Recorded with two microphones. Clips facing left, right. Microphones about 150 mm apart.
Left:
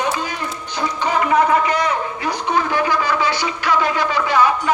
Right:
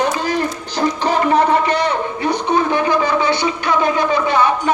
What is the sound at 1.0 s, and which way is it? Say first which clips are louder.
A man's voice: right 1 dB; 30° right (ahead or behind).